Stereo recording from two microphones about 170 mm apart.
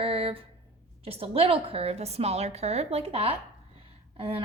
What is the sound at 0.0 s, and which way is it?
A woman's voice, 35° right (ahead or behind).